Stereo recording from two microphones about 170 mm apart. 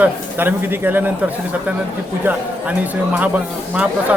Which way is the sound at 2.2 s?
10° right (ahead or behind).